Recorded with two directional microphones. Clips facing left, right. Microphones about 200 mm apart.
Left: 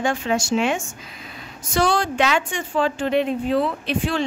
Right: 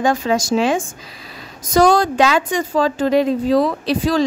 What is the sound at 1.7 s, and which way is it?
A woman's voice, 40° right (ahead or behind).